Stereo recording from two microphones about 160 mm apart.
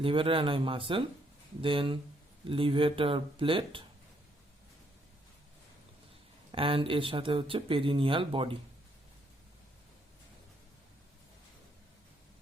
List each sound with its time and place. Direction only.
0.0 s speech: 35° right (ahead or behind)
6.5 s speech: 35° right (ahead or behind)